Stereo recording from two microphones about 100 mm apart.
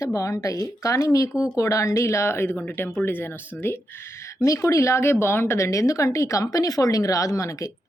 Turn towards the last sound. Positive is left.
turn(degrees=30)  # may be behind; listen again after turning